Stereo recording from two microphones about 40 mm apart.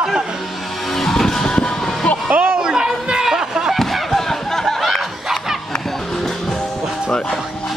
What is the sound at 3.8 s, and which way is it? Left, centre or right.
Slam, centre.